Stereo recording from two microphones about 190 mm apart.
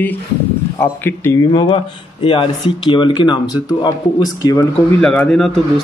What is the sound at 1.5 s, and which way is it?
Speech, 25° left (ahead or behind).